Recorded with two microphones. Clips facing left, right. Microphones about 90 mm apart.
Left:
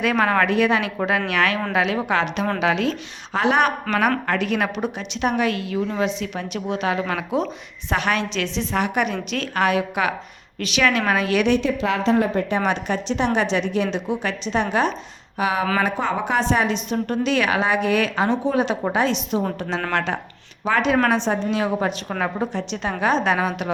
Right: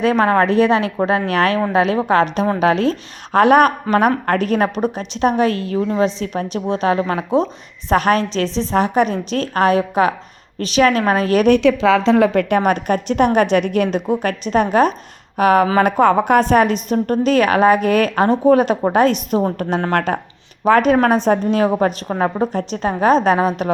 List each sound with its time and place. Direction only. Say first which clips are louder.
0.0 s a woman's voice: right 5 dB; 35° right (ahead or behind)
11.6 s speech: right 8 dB; 90° right
12.5 s a woman's voice: right 6 dB; 50° right (ahead or behind)